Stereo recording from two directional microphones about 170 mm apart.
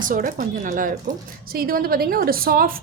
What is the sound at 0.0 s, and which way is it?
A woman's voice, 55° right (ahead or behind).